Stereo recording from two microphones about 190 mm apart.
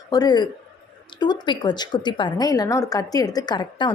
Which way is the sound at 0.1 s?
20° left (ahead or behind).